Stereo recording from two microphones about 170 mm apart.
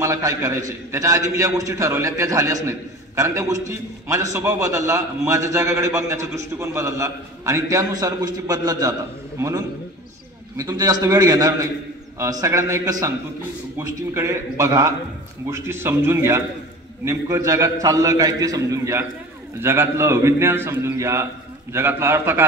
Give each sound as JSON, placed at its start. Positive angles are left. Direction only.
{"t": 0.0, "sound": "a man's voice", "side_deg": -20}